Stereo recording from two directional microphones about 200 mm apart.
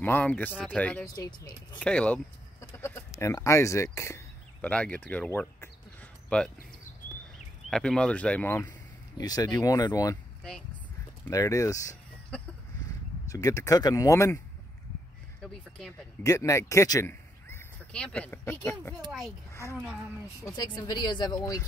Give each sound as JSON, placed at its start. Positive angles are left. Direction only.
{"t": 0.0, "sound": "speech", "side_deg": 10}
{"t": 1.1, "sound": "speech", "side_deg": 20}
{"t": 1.8, "sound": "speech", "side_deg": 5}
{"t": 7.7, "sound": "speech", "side_deg": 5}
{"t": 11.2, "sound": "speech", "side_deg": 15}
{"t": 12.3, "sound": "a sound", "side_deg": 5}
{"t": 13.3, "sound": "speech", "side_deg": 15}
{"t": 16.2, "sound": "speech", "side_deg": 15}
{"t": 20.4, "sound": "speech", "side_deg": 20}